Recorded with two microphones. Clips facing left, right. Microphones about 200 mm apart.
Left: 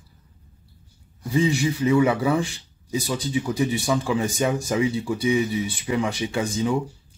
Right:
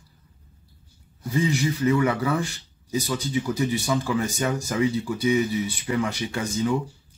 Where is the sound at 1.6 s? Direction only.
15° left (ahead or behind).